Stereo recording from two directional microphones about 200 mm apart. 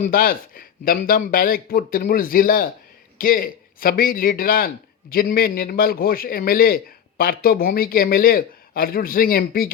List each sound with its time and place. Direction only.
0.0 s a man's voice: 45° left (ahead or behind)